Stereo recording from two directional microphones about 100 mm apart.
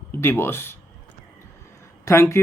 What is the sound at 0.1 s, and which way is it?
Speech, 20° left (ahead or behind).